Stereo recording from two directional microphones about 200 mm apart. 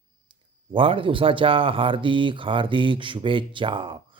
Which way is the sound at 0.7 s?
25° right (ahead or behind).